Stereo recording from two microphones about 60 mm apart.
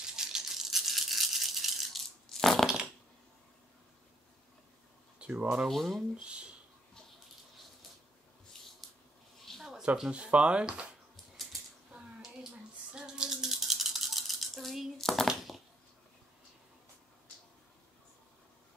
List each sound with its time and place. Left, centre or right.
0.0 s toothbrush: centre
2.2 s crushing: centre
2.6 s a sound: centre
5.2 s speech: right
5.7 s speech: centre
6.2 s speech: centre
8.5 s squish: centre
9.6 s a sound: centre
9.9 s speech: centre
12.9 s rattle: centre
15.2 s a sound: centre